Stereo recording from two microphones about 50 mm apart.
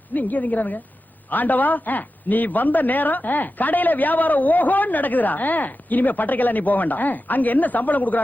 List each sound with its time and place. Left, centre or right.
0.1 s a man's voice: left